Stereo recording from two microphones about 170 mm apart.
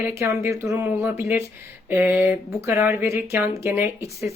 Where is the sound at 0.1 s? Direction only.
15° right (ahead or behind).